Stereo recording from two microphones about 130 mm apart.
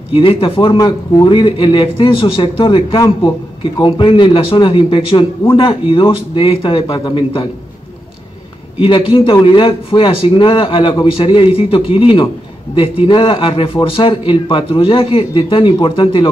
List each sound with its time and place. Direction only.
0.1 s a man's voice: 45° left (ahead or behind)
3.0 s a man's voice: 25° left (ahead or behind)
3.7 s a man's voice: 40° left (ahead or behind)
8.8 s a man's voice: 40° left (ahead or behind)